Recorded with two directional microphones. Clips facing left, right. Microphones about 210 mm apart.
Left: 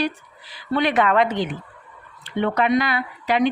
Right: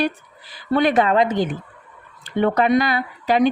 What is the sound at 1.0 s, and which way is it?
Speech, 30° right (ahead or behind).